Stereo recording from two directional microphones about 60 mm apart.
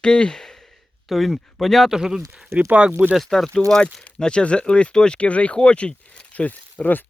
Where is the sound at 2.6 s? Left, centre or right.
Right.